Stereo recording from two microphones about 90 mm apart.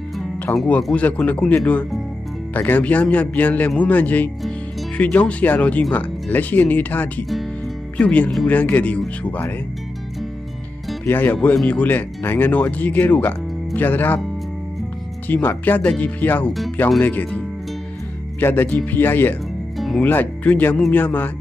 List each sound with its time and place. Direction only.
0.5 s a man's voice: 20° left (ahead or behind)
7.2 s music: centre (ahead or behind)
8.0 s a man's voice: 15° left (ahead or behind)
11.1 s speech: 25° left (ahead or behind)
15.2 s a man's voice: 20° left (ahead or behind)
18.4 s speech: 25° left (ahead or behind)